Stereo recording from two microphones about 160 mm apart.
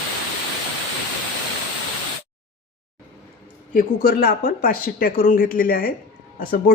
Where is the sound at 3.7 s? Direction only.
65° left (ahead or behind).